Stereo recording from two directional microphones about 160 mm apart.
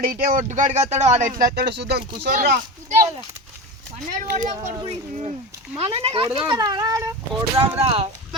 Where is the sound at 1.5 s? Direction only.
90° right.